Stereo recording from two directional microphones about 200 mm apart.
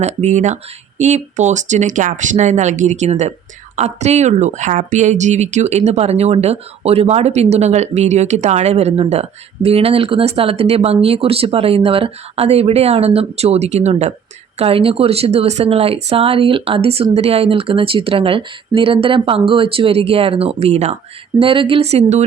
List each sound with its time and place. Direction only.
0.0 s speech: 35° right (ahead or behind)